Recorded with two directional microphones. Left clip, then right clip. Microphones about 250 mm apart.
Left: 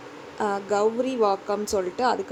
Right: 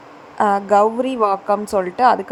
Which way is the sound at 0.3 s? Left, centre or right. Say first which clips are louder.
Right 10 dB; right.